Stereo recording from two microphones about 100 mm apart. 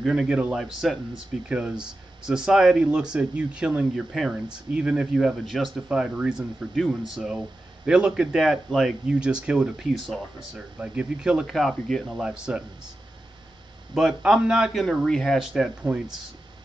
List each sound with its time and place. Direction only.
0.0 s speech: 5° right (ahead or behind)
12.2 s speech: 10° right (ahead or behind)
13.9 s speech: 5° right (ahead or behind)